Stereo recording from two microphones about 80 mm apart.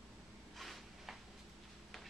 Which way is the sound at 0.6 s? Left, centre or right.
Centre.